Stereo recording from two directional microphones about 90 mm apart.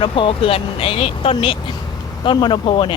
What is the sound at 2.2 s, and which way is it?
Speech, 65° left (ahead or behind).